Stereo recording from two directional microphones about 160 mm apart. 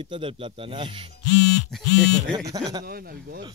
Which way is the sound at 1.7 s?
5° left (ahead or behind).